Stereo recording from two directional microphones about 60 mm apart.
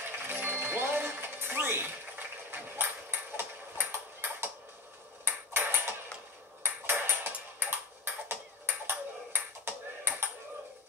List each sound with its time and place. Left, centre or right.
0.1 s music: right
5.2 s ping: right